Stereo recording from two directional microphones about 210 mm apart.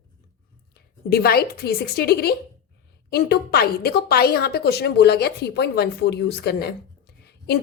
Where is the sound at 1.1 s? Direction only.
45° left (ahead or behind).